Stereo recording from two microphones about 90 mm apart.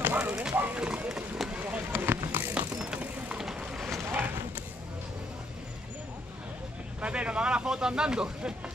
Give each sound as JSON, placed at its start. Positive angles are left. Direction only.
{"t": 0.2, "sound": "clip-clop", "side_deg": -10}
{"t": 0.6, "sound": "run", "side_deg": -15}
{"t": 1.9, "sound": "vehicle", "side_deg": -25}
{"t": 2.8, "sound": "vehicle", "side_deg": -10}
{"t": 4.0, "sound": "a sound", "side_deg": -25}
{"t": 7.0, "sound": "speech", "side_deg": -10}